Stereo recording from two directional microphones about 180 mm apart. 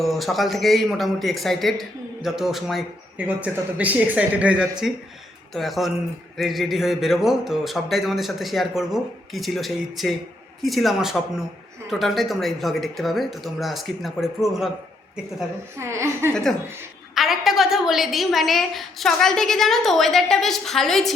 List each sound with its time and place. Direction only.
0.0 s speech: centre (ahead or behind)
15.8 s a woman's voice: 15° right (ahead or behind)
16.3 s speech: 5° left (ahead or behind)